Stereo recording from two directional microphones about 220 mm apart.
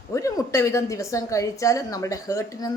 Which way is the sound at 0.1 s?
15° left (ahead or behind).